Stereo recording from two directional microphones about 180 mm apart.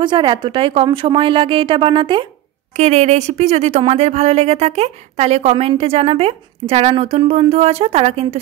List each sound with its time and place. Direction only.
0.0 s a woman's voice: 25° right (ahead or behind)
2.7 s a woman's voice: 40° right (ahead or behind)